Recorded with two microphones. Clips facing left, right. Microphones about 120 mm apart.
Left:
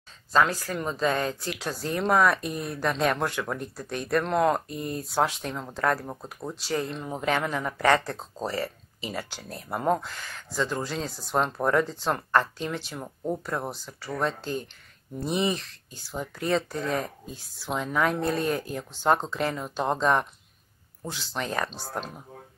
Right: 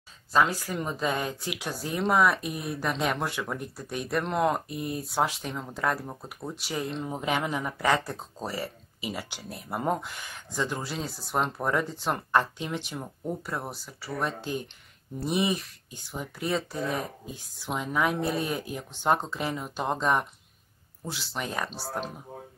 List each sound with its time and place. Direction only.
0.3 s a woman's voice: 10° right (ahead or behind)